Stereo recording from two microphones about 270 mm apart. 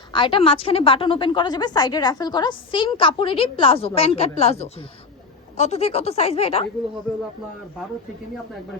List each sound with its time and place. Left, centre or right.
0.1 s a woman's voice: centre